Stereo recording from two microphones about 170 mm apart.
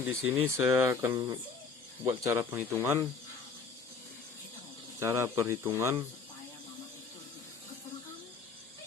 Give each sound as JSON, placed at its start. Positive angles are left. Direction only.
{"t": 0.0, "sound": "speech", "side_deg": -15}
{"t": 4.9, "sound": "speech", "side_deg": -15}